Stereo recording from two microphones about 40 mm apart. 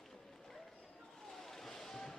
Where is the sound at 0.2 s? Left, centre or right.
Centre.